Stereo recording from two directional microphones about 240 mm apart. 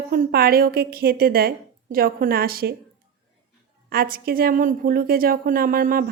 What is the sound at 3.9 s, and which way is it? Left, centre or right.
A woman's voice, right.